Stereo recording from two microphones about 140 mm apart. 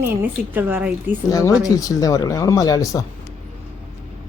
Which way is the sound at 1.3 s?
25° left (ahead or behind).